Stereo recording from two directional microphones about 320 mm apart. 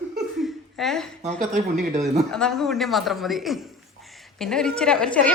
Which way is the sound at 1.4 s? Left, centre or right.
Right.